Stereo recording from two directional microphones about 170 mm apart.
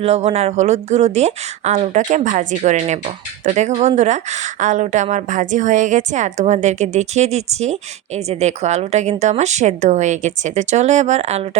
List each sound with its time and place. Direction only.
0.0 s a woman's voice: 40° right (ahead or behind)